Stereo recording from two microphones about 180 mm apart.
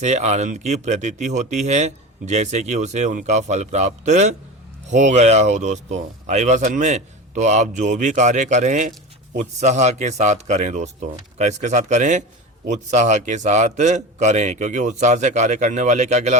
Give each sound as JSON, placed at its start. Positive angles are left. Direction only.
{"t": 0.0, "sound": "speech", "side_deg": -40}